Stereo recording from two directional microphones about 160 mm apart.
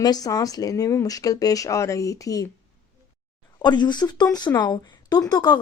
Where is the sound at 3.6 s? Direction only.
25° left (ahead or behind).